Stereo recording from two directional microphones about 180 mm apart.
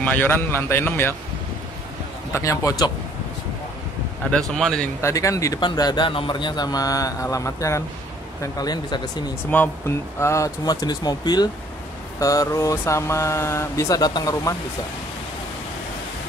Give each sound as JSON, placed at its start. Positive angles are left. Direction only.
{"t": 0.0, "sound": "speech", "side_deg": 10}
{"t": 2.3, "sound": "speech", "side_deg": 20}
{"t": 4.3, "sound": "speech", "side_deg": 5}
{"t": 5.0, "sound": "speech", "side_deg": 15}
{"t": 9.5, "sound": "speech", "side_deg": 10}